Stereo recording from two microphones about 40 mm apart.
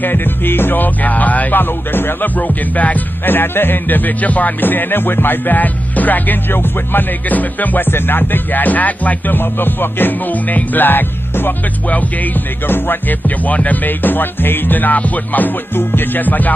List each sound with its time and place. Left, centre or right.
0.0 s music: left
1.6 s music: left
2.2 s music: left
3.3 s music: left
6.5 s music: left
7.2 s music: left
7.9 s music: left
9.3 s music: left
12.6 s music: left
13.5 s music: left
15.7 s music: left
16.2 s music: left